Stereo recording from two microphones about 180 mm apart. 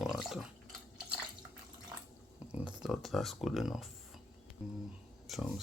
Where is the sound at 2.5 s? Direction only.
5° right (ahead or behind).